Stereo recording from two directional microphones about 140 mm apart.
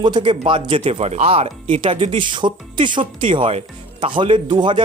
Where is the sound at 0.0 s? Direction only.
35° right (ahead or behind).